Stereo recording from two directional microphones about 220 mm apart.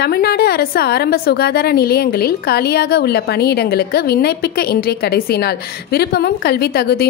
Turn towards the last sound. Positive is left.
turn(degrees=45)  # may be behind; listen again after turning